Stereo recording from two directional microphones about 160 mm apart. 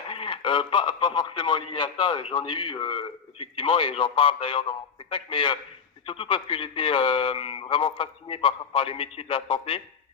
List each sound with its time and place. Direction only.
0.1 s speech: 35° left (ahead or behind)